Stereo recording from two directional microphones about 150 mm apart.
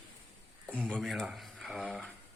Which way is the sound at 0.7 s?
Centre (ahead or behind).